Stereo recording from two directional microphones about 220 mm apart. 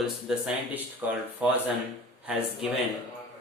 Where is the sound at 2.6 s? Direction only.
Centre (ahead or behind).